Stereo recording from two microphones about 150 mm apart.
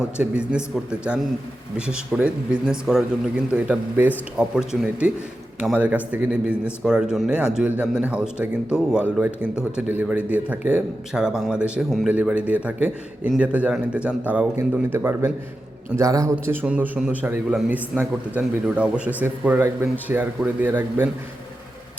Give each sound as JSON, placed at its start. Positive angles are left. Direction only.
{"t": 0.2, "sound": "a man's voice", "side_deg": -5}